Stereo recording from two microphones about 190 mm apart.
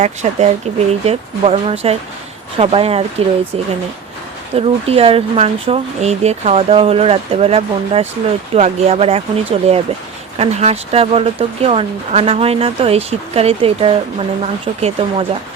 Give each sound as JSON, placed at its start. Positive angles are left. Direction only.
{"t": 0.0, "sound": "speech", "side_deg": -35}
{"t": 4.5, "sound": "speech", "side_deg": -30}